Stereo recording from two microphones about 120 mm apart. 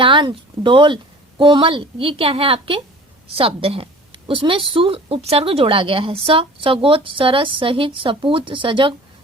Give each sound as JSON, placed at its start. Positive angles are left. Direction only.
{"t": 0.0, "sound": "a woman's voice", "side_deg": -40}